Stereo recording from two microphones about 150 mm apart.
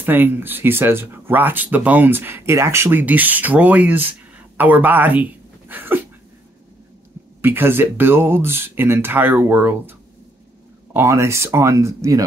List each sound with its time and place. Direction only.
0.0 s speech: 15° right (ahead or behind)
7.4 s speech: 15° right (ahead or behind)